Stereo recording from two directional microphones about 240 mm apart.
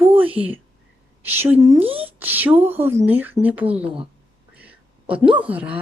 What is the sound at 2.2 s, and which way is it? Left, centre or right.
Speech, centre.